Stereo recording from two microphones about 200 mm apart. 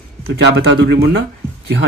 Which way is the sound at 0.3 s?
55° right (ahead or behind).